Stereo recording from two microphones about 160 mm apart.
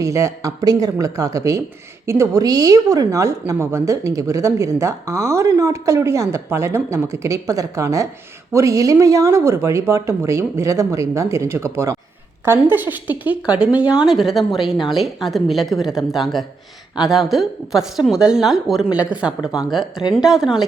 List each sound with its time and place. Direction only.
0.0 s a woman's voice: 20° right (ahead or behind); by 20.7 s centre (ahead or behind)